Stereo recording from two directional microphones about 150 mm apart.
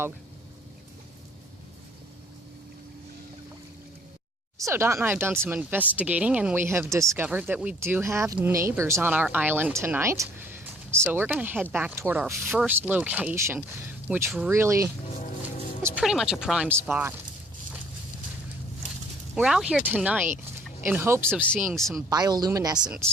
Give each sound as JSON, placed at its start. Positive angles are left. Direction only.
{"t": 4.5, "sound": "speech", "side_deg": -20}
{"t": 16.0, "sound": "speech", "side_deg": -5}
{"t": 16.9, "sound": "speech", "side_deg": -15}
{"t": 19.4, "sound": "speech", "side_deg": -5}
{"t": 21.7, "sound": "speech", "side_deg": 0}
{"t": 22.1, "sound": "speech", "side_deg": -25}